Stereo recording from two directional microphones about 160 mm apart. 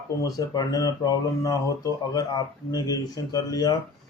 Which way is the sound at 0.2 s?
25° left (ahead or behind).